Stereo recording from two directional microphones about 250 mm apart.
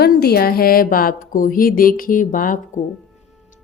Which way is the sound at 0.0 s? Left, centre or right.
Left.